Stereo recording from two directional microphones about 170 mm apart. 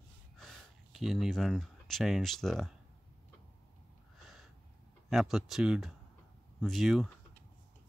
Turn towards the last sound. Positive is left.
turn(degrees=0)  # may be behind; listen again after turning